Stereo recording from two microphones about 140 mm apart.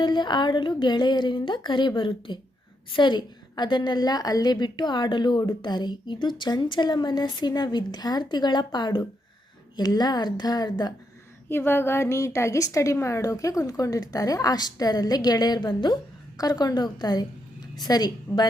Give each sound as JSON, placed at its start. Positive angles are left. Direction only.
{"t": 0.0, "sound": "a woman's voice", "side_deg": 35}
{"t": 11.4, "sound": "a woman's voice", "side_deg": 15}